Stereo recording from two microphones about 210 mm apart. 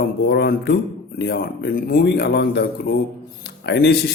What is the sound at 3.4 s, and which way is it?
Music, 50° left (ahead or behind).